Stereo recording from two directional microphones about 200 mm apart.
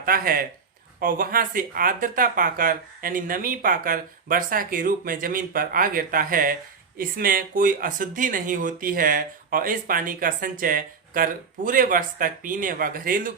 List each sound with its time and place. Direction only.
0.0 s speech: 45° right (ahead or behind)